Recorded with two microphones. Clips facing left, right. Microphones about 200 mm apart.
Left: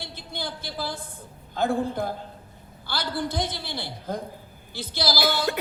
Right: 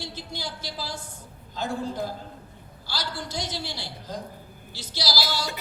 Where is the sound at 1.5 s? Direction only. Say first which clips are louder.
Left 5 dB; 55° left (ahead or behind).